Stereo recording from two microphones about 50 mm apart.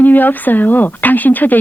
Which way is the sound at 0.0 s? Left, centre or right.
Left.